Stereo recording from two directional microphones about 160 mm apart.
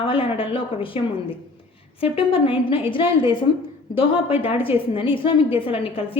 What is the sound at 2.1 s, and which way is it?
A woman's voice, 35° left (ahead or behind).